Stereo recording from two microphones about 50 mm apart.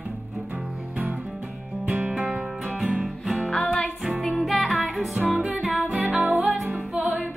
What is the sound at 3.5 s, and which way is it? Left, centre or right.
Music, centre.